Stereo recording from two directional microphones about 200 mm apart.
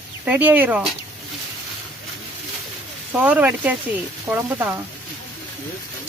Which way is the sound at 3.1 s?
5° right (ahead or behind).